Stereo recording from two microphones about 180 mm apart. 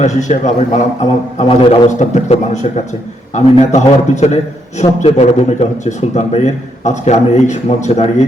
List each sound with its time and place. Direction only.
0.0 s a man's voice: 40° left (ahead or behind)